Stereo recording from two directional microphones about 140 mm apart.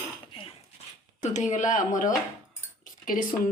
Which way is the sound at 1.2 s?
55° left (ahead or behind).